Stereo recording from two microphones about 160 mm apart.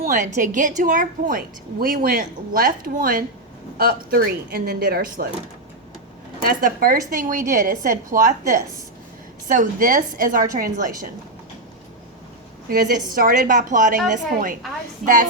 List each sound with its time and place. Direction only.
0.0 s a woman's voice: 55° right (ahead or behind)
6.4 s a woman's voice: 60° right (ahead or behind)
13.1 s a woman's voice: 60° right (ahead or behind)